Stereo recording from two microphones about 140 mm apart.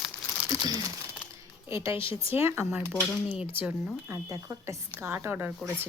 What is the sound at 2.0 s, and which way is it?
Speech, 40° left (ahead or behind).